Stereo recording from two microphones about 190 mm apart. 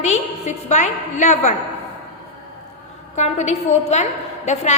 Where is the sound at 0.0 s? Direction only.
35° left (ahead or behind).